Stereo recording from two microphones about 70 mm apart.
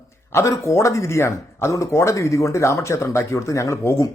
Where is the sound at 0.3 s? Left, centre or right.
Left.